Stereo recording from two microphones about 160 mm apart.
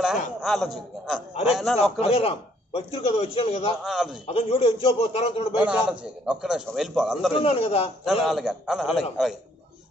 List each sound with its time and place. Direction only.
0.4 s a man's voice: centre (ahead or behind)
1.8 s a man's voice: 40° left (ahead or behind)
3.8 s a man's voice: 5° right (ahead or behind)
4.3 s a man's voice: 35° left (ahead or behind)
5.6 s a man's voice: 5° right (ahead or behind)
7.3 s a man's voice: 40° left (ahead or behind)
8.0 s a man's voice: centre (ahead or behind)